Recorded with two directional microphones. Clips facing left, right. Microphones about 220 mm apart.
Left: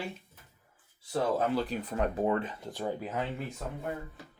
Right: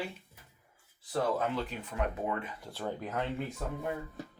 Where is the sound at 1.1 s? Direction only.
35° left (ahead or behind).